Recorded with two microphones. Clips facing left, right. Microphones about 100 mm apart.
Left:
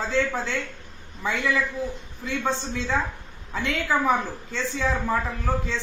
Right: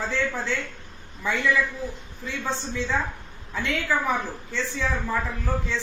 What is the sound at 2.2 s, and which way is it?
A woman's voice, 15° left (ahead or behind).